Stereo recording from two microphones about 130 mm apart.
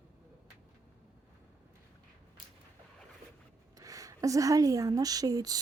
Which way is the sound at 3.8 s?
25° right (ahead or behind).